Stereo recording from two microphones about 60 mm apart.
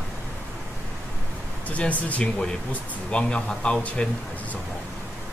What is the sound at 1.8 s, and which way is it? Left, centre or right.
Speech, left.